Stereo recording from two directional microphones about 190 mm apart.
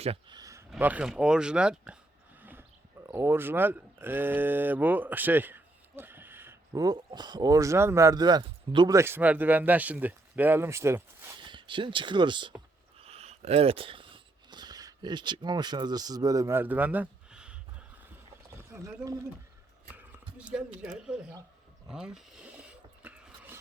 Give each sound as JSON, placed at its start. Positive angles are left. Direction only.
{"t": 0.0, "sound": "speech", "side_deg": -30}
{"t": 0.3, "sound": "a sound", "side_deg": -15}
{"t": 0.7, "sound": "speech", "side_deg": -10}
{"t": 2.4, "sound": "a sound", "side_deg": -10}
{"t": 3.1, "sound": "speech", "side_deg": -10}
{"t": 11.3, "sound": "speech", "side_deg": -25}
{"t": 13.0, "sound": "a sound", "side_deg": -35}
{"t": 21.8, "sound": "speech", "side_deg": -5}
{"t": 23.0, "sound": "roaring cats", "side_deg": -5}